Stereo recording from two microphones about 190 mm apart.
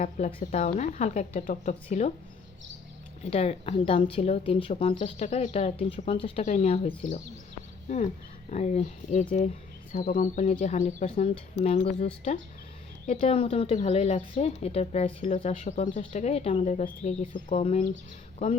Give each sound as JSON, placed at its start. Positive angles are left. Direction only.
{"t": 0.3, "sound": "a woman's voice", "side_deg": 30}
{"t": 3.2, "sound": "a woman's voice", "side_deg": 30}
{"t": 8.4, "sound": "a woman's voice", "side_deg": 35}